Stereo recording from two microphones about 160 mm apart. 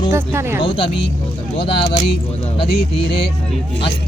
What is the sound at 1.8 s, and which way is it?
Speech, 90° left.